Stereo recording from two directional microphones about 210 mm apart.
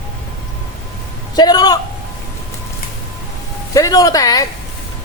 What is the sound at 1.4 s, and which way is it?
Speech, 20° left (ahead or behind).